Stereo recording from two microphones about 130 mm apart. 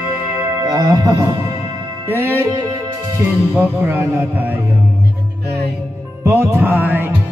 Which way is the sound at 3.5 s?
15° right (ahead or behind).